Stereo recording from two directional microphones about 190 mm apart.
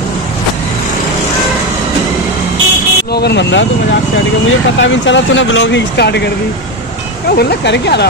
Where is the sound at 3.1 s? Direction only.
60° left (ahead or behind).